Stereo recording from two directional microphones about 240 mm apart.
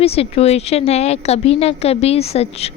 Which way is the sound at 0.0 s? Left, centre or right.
Left.